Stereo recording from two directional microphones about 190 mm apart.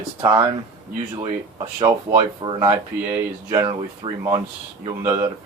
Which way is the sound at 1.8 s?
15° right (ahead or behind).